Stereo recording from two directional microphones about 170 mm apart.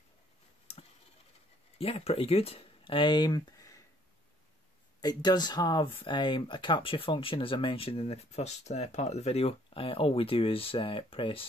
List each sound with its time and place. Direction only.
0.7 s clicking: 35° left (ahead or behind)
1.8 s speech: 35° left (ahead or behind)
5.0 s speech: 25° left (ahead or behind)